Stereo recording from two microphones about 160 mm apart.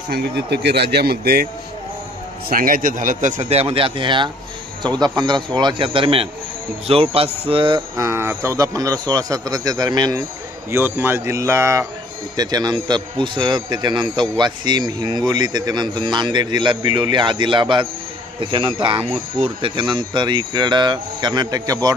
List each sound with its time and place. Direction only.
0.1 s speech: 90° right; by 1.5 s 75° right (ahead or behind)
2.5 s a man's voice: 60° right (ahead or behind); by 7.8 s 30° right (ahead or behind)
8.0 s a man's voice: 15° right (ahead or behind)
10.7 s a man's voice: 15° right (ahead or behind)